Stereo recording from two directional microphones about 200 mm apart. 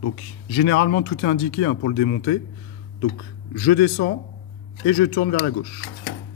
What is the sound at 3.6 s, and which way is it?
Speech, 50° left (ahead or behind).